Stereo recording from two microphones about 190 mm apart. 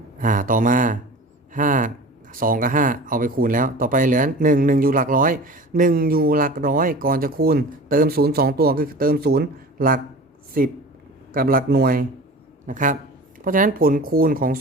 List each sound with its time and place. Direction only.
0.2 s speech: 45° right (ahead or behind)